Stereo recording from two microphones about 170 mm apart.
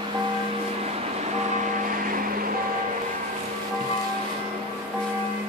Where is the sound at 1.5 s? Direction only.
45° right (ahead or behind).